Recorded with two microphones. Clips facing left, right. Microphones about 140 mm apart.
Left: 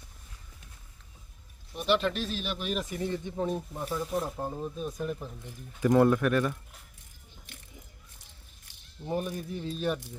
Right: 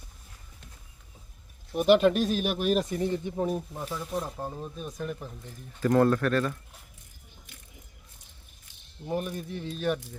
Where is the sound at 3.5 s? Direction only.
5° right (ahead or behind); by 6.5 s 15° left (ahead or behind).